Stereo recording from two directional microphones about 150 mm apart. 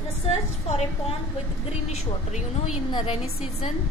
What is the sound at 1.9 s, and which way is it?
A woman's voice, 50° left (ahead or behind).